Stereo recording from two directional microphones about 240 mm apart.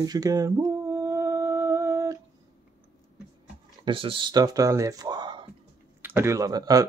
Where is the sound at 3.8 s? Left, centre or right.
Right.